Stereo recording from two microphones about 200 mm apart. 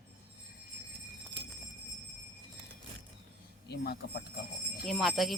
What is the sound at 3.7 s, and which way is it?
Speech, 55° left (ahead or behind).